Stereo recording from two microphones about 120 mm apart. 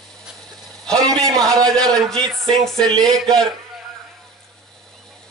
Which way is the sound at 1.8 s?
5° left (ahead or behind).